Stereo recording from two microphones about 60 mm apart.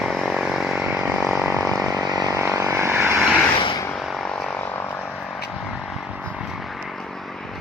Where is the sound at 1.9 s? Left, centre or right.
Right.